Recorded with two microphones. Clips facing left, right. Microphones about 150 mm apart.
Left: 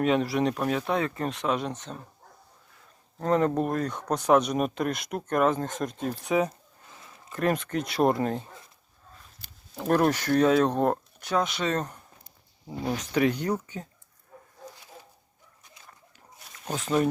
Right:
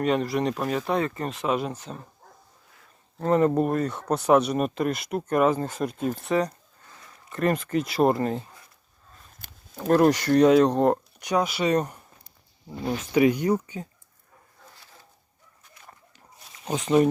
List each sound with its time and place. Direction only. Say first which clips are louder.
0.0 s speech: even; centre (ahead or behind)
3.2 s speech: right 3 dB; 5° right (ahead or behind)
6.8 s a sound: even; 20° left (ahead or behind)
7.3 s speech: right 2 dB; centre (ahead or behind)
9.7 s speech: right 4 dB; centre (ahead or behind)
10.1 s speech: right 4 dB; 10° right (ahead or behind)
16.6 s speech: right 5 dB; 5° right (ahead or behind)